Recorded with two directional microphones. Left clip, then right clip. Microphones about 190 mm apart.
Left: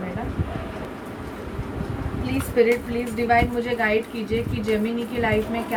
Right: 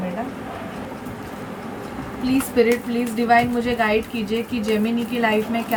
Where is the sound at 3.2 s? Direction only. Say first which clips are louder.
Right 3 dB; 25° right (ahead or behind).